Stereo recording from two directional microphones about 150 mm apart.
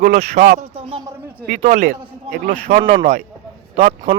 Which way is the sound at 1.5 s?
55° right (ahead or behind).